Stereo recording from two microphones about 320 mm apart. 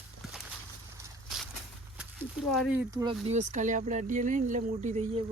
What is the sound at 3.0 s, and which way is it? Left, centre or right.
Speech, centre.